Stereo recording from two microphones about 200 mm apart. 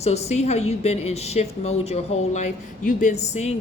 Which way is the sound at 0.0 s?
30° left (ahead or behind).